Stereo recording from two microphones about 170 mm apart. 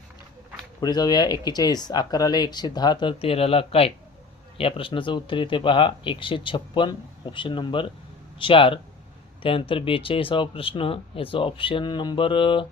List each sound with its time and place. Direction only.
0.8 s speech: 25° left (ahead or behind)